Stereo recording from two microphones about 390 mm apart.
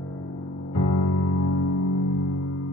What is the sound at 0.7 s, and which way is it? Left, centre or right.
Music, left.